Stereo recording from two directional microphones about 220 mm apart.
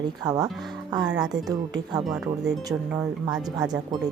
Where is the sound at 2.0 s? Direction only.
5° right (ahead or behind).